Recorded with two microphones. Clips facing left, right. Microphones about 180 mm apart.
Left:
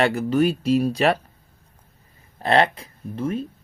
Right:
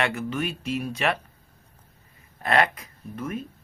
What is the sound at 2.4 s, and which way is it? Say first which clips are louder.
Speech: left 4 dB; 30° left (ahead or behind).